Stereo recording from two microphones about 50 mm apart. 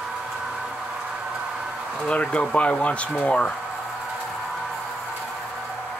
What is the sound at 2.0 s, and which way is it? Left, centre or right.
Speech, left.